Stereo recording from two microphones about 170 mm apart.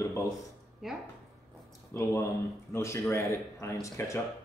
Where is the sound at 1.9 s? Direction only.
15° left (ahead or behind).